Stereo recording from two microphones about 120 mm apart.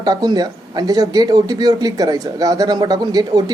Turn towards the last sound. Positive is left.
turn(degrees=-35)  # may be behind; listen again after turning